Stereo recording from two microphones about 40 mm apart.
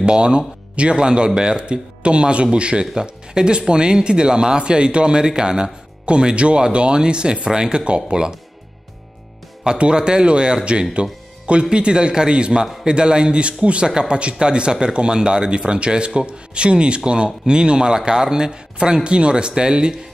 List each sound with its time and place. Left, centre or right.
0.0 s speech: right
9.7 s speech: right